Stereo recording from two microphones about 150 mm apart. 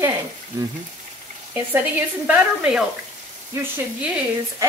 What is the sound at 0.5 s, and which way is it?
A woman's voice, 20° right (ahead or behind).